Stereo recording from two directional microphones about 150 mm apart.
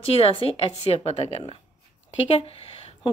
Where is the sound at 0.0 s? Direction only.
40° left (ahead or behind).